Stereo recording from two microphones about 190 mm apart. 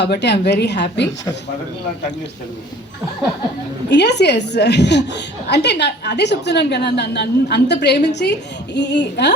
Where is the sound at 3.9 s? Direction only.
65° left (ahead or behind).